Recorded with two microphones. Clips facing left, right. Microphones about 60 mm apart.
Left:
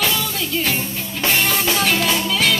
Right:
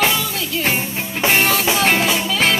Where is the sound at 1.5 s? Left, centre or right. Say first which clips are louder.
Right 3 dB; centre.